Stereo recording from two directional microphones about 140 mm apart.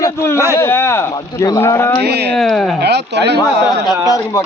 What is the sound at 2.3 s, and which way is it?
Speech, 5° left (ahead or behind).